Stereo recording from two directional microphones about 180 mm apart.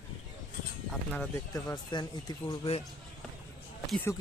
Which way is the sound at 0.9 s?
5° left (ahead or behind).